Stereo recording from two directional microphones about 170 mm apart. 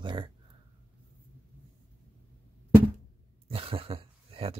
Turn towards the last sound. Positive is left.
turn(degrees=-35)  # may be behind; listen again after turning